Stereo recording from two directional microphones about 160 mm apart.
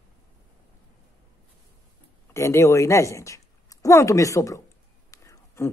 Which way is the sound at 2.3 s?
15° left (ahead or behind).